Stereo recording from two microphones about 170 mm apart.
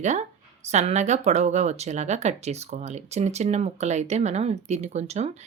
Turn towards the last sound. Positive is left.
turn(degrees=-40)  # may be behind; listen again after turning